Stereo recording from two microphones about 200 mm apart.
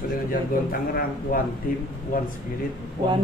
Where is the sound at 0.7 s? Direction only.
50° left (ahead or behind).